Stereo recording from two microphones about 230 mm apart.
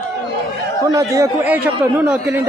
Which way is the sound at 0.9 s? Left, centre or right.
Centre.